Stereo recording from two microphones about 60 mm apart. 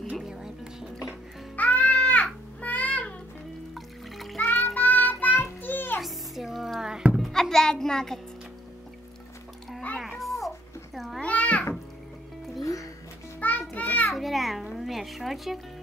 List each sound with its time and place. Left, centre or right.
0.2 s speech: centre
1.6 s music: left
3.7 s music: centre
4.4 s music: left
5.9 s a sound: centre
7.2 s music: centre
9.9 s cat: centre
11.2 s babbling: left
13.4 s music: left
14.1 s babbling: centre